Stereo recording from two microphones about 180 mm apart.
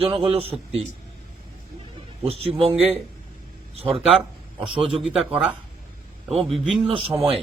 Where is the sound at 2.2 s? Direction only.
35° right (ahead or behind).